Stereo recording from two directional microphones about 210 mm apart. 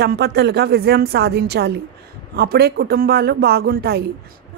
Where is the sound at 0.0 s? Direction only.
50° right (ahead or behind).